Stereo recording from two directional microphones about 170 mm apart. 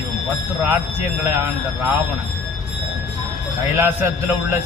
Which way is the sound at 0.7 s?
15° right (ahead or behind).